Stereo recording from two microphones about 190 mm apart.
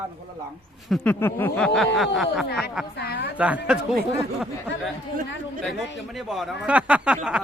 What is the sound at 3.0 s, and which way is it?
Speech, 60° left (ahead or behind).